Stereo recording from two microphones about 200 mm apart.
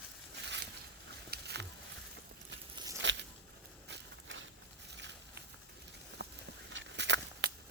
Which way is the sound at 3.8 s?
65° right (ahead or behind).